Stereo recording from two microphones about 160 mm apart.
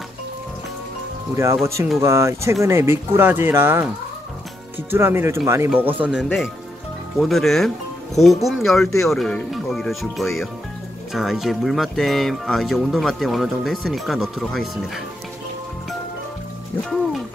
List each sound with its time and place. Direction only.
1.3 s speech: 20° right (ahead or behind)
4.9 s speech: 15° right (ahead or behind)
6.2 s speech: 10° left (ahead or behind)